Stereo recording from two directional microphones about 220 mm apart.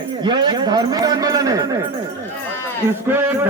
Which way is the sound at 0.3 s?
20° right (ahead or behind).